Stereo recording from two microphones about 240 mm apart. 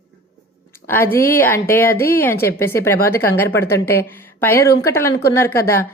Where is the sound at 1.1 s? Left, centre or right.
Left.